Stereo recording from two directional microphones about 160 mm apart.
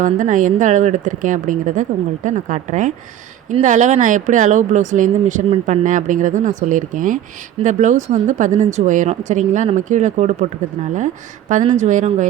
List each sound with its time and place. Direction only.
0.0 s speech: 55° right (ahead or behind)